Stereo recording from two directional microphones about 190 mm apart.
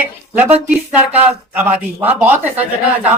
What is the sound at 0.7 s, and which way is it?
A man's voice, 10° right (ahead or behind).